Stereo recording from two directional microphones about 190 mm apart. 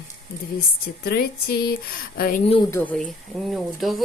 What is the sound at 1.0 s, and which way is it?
Speech, 55° left (ahead or behind).